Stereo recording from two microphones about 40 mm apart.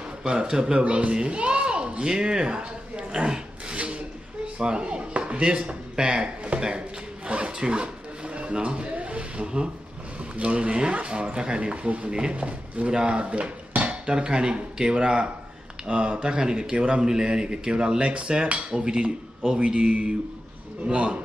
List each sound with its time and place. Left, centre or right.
0.2 s speech: right
7.2 s rub: right
8.5 s speech: right
9.4 s speech: right
10.3 s speech: right
12.9 s dishes: right
14.1 s speech: right